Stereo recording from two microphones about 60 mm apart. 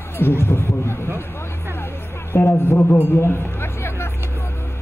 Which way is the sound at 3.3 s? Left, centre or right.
Left.